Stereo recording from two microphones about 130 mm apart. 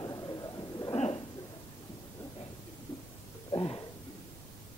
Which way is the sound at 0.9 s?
50° left (ahead or behind).